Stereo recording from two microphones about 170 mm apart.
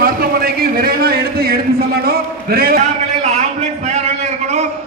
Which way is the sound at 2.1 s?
65° right (ahead or behind).